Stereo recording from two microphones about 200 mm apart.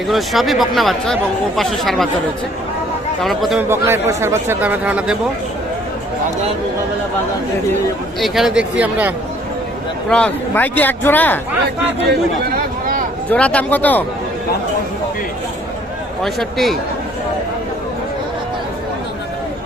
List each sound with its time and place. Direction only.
0.1 s speech: centre (ahead or behind)
3.2 s speech: centre (ahead or behind)
3.7 s a man's voice: 10° right (ahead or behind)
8.2 s speech: centre (ahead or behind)
10.1 s a man's voice: 5° left (ahead or behind)
12.5 s a sound: 45° right (ahead or behind)
13.3 s a man's voice: 5° left (ahead or behind)
16.2 s speech: centre (ahead or behind)